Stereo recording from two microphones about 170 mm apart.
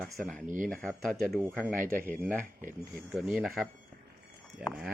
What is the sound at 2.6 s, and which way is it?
Speech, 55° right (ahead or behind).